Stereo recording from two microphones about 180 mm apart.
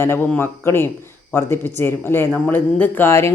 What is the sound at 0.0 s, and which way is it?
Speech, 10° left (ahead or behind).